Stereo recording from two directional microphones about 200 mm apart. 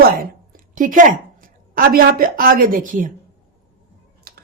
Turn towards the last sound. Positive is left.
turn(degrees=-50)  # may be behind; listen again after turning